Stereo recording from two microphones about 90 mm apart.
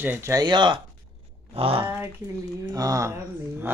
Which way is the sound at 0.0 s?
25° right (ahead or behind).